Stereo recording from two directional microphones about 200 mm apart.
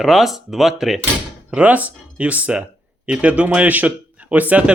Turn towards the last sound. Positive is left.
turn(degrees=-5)  # may be behind; listen again after turning